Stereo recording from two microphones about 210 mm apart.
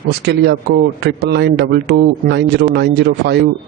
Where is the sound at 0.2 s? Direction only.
50° right (ahead or behind).